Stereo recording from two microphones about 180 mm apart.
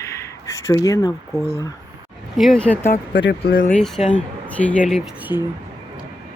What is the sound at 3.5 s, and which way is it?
Speech, 50° left (ahead or behind).